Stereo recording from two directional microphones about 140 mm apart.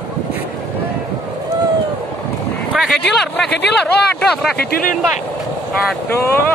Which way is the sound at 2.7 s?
Centre (ahead or behind).